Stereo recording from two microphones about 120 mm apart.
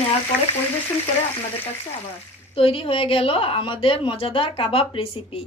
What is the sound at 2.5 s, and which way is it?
Speech, 50° left (ahead or behind).